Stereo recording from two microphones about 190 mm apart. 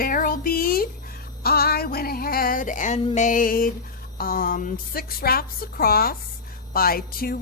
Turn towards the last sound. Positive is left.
turn(degrees=50)  # may be behind; listen again after turning